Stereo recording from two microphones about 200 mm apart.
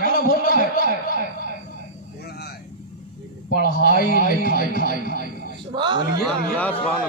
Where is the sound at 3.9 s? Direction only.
50° left (ahead or behind).